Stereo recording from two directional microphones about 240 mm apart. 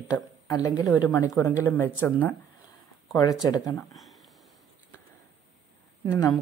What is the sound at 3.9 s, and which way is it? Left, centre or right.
Sniff, centre.